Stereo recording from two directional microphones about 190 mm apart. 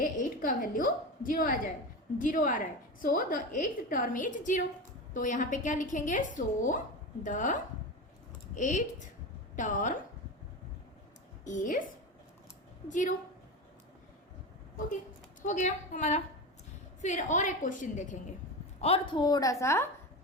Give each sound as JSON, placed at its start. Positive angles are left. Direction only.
{"t": 0.0, "sound": "a woman's voice", "side_deg": 45}
{"t": 11.4, "sound": "a woman's voice", "side_deg": 45}
{"t": 12.9, "sound": "a woman's voice", "side_deg": 40}
{"t": 15.4, "sound": "a woman's voice", "side_deg": 40}
{"t": 18.8, "sound": "a woman's voice", "side_deg": 30}